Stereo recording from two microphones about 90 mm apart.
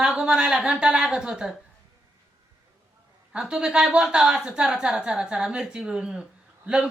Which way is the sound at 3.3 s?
5° right (ahead or behind).